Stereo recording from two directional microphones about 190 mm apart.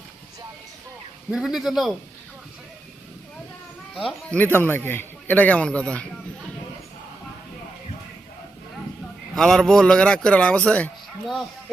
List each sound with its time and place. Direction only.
1.3 s a man's voice: 5° right (ahead or behind)
4.5 s a man's voice: 10° left (ahead or behind)
9.3 s a man's voice: 5° left (ahead or behind)